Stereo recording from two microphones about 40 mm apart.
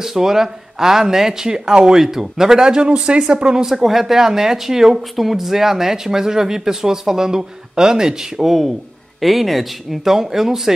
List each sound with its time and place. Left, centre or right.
0.0 s speech: centre
3.6 s speech: centre